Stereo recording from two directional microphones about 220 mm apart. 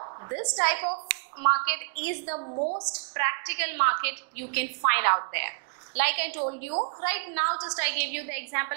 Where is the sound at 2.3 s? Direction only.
30° right (ahead or behind).